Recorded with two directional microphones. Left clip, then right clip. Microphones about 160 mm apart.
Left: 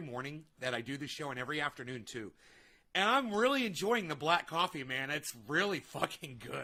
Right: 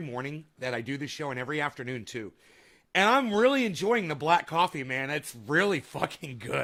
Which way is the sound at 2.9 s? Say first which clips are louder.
Right 7 dB; 30° right (ahead or behind).